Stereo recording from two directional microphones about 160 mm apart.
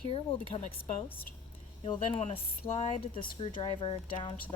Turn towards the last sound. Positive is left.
turn(degrees=30)  # may be behind; listen again after turning